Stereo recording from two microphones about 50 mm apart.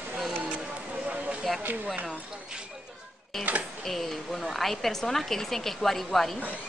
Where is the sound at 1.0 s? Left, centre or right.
Right.